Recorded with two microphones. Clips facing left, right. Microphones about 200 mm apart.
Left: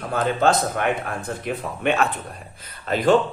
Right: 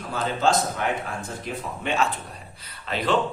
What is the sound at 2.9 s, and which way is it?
Speech, 50° left (ahead or behind).